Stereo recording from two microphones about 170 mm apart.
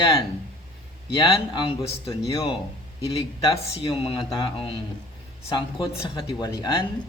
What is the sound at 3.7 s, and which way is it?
Speech, 35° left (ahead or behind).